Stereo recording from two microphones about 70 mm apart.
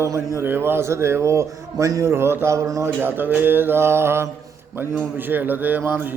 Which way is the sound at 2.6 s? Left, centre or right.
Right.